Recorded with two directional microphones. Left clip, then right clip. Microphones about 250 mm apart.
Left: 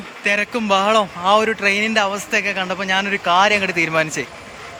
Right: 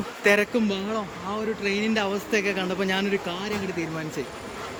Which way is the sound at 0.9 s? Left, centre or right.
Left.